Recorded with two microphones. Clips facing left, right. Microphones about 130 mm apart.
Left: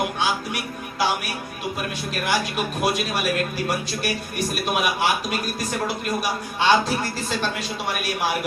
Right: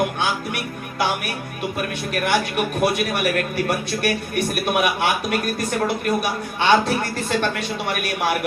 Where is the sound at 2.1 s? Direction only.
60° right (ahead or behind).